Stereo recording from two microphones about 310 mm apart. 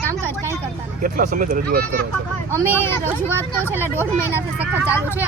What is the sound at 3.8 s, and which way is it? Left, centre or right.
Speech, centre.